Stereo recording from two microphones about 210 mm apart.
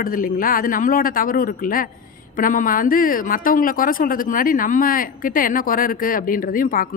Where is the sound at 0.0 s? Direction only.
40° left (ahead or behind).